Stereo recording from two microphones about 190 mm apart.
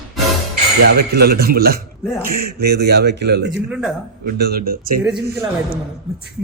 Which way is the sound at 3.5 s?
5° right (ahead or behind).